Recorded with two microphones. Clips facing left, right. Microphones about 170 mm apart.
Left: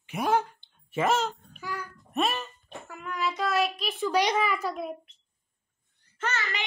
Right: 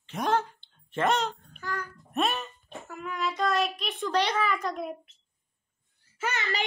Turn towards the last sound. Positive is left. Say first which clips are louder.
# even
turn(degrees=-5)  # may be behind; listen again after turning